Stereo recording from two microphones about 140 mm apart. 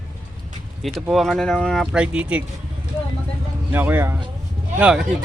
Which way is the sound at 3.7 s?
15° right (ahead or behind).